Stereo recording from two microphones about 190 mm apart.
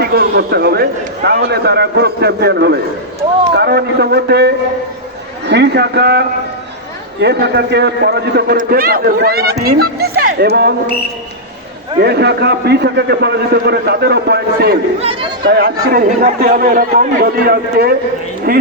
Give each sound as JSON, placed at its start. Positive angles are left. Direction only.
{"t": 0.0, "sound": "a man's voice", "side_deg": -55}
{"t": 11.9, "sound": "a man's voice", "side_deg": -60}